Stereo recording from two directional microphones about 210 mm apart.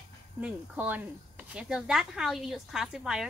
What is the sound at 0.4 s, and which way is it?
A woman's voice, 5° right (ahead or behind).